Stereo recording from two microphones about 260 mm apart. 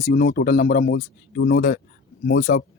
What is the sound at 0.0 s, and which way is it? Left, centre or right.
Speech, left.